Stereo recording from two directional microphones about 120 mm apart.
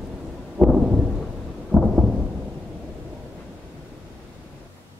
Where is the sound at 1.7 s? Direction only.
Centre (ahead or behind).